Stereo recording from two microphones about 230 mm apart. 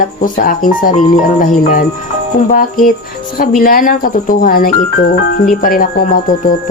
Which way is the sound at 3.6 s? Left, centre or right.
Left.